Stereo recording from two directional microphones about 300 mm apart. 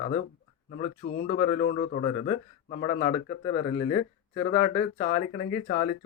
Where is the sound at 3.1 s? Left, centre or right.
Centre.